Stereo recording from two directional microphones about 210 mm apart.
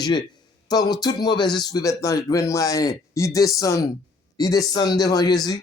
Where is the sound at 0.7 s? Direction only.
20° left (ahead or behind).